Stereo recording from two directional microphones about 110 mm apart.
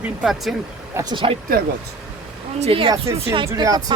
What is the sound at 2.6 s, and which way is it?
Speech, 55° right (ahead or behind).